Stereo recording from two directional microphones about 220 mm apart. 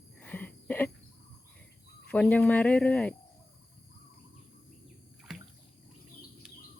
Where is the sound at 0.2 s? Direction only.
5° left (ahead or behind).